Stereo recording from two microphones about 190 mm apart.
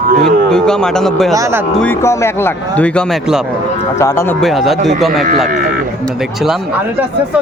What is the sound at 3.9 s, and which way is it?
Speech, 15° left (ahead or behind).